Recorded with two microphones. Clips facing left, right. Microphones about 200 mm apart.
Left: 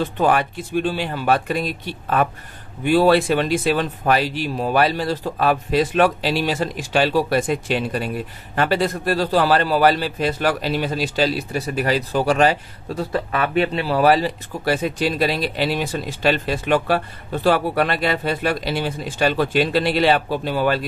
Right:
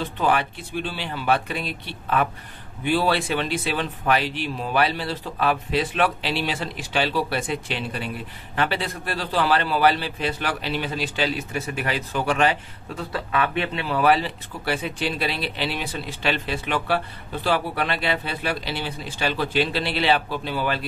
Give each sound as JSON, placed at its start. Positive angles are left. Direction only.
{"t": 0.0, "sound": "a man's voice", "side_deg": 45}